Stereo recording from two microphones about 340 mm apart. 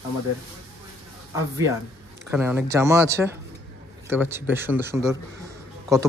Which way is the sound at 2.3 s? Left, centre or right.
Centre.